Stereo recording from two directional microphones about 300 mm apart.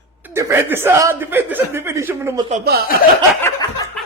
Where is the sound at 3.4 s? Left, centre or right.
Centre.